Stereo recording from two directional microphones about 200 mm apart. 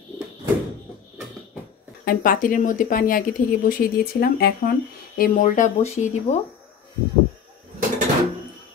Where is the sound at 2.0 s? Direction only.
45° left (ahead or behind).